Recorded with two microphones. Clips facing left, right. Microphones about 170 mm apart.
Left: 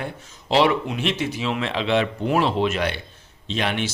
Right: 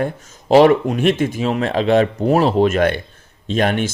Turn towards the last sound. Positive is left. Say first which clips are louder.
# right 7 dB
turn(degrees=-50)  # may be behind; listen again after turning